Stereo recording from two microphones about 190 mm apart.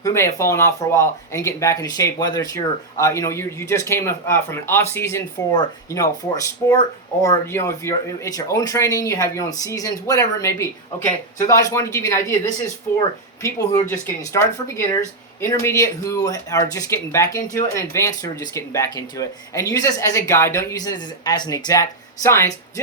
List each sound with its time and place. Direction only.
0.0 s speech: 15° left (ahead or behind)